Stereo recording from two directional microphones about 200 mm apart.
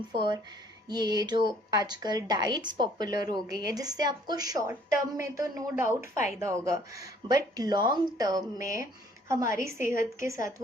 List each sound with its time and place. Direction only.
0.9 s a woman's voice: 20° right (ahead or behind)